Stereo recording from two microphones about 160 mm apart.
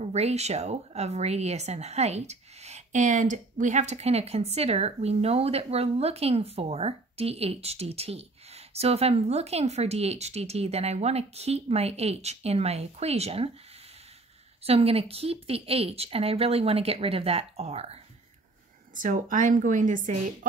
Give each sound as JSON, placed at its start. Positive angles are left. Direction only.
{"t": 0.0, "sound": "speech", "side_deg": -40}
{"t": 14.6, "sound": "speech", "side_deg": -40}
{"t": 18.9, "sound": "a woman's voice", "side_deg": -55}